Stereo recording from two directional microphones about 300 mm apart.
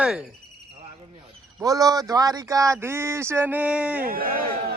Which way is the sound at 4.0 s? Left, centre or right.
Right.